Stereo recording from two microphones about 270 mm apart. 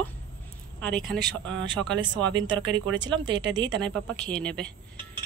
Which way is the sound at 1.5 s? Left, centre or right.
Right.